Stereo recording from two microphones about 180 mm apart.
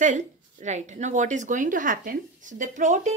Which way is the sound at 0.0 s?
45° right (ahead or behind).